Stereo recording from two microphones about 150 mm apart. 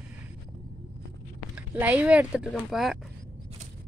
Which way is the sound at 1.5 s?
10° right (ahead or behind).